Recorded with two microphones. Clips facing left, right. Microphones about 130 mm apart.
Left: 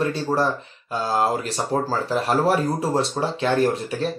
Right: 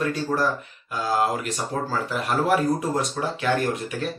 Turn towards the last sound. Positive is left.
turn(degrees=30)  # may be behind; listen again after turning